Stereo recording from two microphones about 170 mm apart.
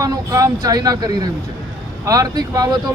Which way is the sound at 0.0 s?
20° right (ahead or behind).